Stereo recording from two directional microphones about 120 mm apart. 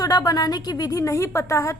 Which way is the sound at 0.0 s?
30° left (ahead or behind).